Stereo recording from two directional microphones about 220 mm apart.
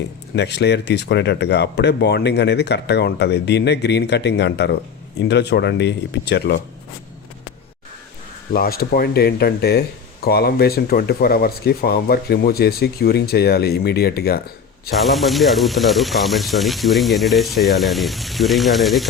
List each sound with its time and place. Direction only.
0.3 s speech: 50° left (ahead or behind)
8.5 s speech: 45° left (ahead or behind)
14.9 s speech: centre (ahead or behind)